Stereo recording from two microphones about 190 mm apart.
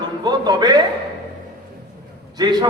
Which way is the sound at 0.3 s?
20° right (ahead or behind).